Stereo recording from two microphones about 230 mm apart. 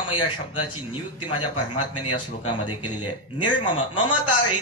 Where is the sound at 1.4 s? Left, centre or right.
Left.